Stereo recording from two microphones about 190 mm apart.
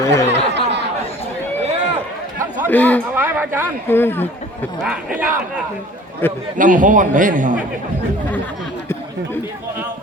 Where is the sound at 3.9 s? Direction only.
10° left (ahead or behind).